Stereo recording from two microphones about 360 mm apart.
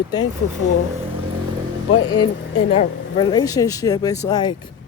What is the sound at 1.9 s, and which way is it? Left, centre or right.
Speech, left.